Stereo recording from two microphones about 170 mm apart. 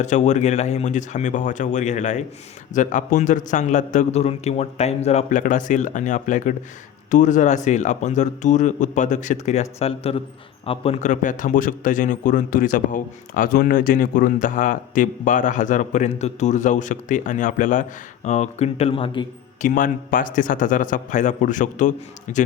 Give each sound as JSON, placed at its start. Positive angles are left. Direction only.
{"t": 0.0, "sound": "a man's voice", "side_deg": 45}
{"t": 19.6, "sound": "a man's voice", "side_deg": 55}